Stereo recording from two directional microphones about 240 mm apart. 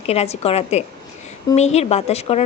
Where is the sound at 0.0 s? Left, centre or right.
Left.